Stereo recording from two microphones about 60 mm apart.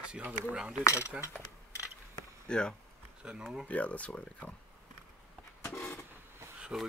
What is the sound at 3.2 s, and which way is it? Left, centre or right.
Speech, centre.